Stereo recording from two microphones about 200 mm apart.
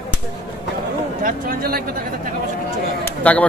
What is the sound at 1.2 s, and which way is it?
Speech, 50° right (ahead or behind).